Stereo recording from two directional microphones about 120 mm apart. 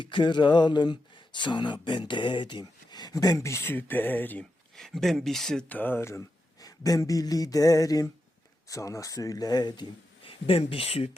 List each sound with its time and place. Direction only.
0.0 s speech: 40° left (ahead or behind); by 4.4 s 15° left (ahead or behind)
4.8 s speech: 5° left (ahead or behind); by 9.8 s 35° left (ahead or behind)
10.2 s speech: 50° left (ahead or behind)